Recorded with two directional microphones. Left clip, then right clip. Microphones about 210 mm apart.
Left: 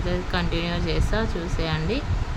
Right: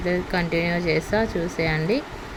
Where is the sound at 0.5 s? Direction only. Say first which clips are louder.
Right 5 dB; 40° left (ahead or behind).